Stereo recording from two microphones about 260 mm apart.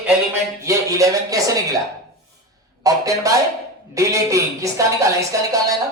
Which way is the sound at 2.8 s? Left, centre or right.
Centre.